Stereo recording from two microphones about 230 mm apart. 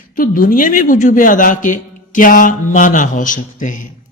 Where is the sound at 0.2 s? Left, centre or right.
Left.